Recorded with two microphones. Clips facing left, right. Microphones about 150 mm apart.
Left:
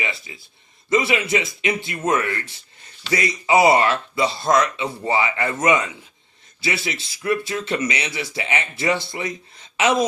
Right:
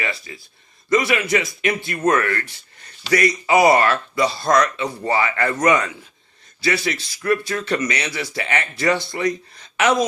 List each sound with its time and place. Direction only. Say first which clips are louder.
0.0 s speech: right 2 dB; 20° left (ahead or behind)